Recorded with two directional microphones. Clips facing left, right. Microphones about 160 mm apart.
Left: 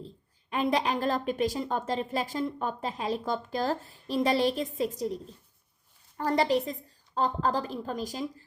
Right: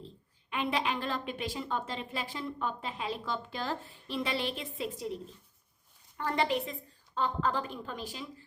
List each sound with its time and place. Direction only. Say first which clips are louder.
0.5 s a woman's voice: left 5 dB; 40° left (ahead or behind)